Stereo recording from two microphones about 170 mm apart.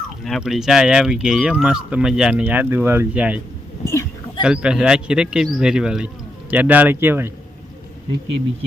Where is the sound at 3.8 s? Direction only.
15° left (ahead or behind).